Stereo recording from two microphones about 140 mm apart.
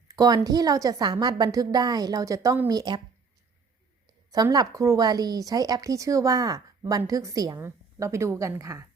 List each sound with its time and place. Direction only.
0.1 s speech: 25° right (ahead or behind)
4.3 s speech: 25° right (ahead or behind)